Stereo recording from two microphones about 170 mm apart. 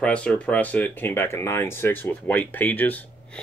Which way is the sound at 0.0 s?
5° left (ahead or behind).